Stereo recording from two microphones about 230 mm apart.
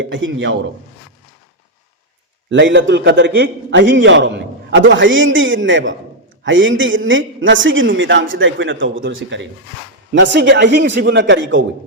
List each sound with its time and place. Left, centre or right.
0.0 s a man's voice: right
2.5 s a man's voice: right